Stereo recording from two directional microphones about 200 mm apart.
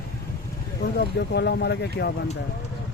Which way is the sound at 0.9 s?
60° left (ahead or behind).